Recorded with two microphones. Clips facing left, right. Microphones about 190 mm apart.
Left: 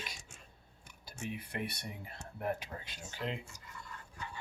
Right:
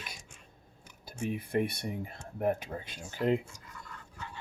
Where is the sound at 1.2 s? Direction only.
50° right (ahead or behind).